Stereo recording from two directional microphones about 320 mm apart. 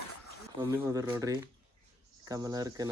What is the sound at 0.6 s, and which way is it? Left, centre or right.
Speech, centre.